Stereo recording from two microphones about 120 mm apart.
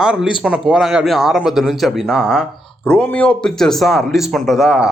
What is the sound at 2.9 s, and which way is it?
A man's voice, 10° left (ahead or behind).